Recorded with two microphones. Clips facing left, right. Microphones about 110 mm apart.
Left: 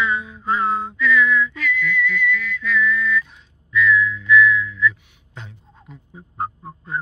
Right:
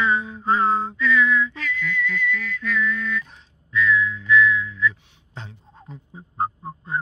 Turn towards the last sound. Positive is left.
turn(degrees=-20)  # may be behind; listen again after turning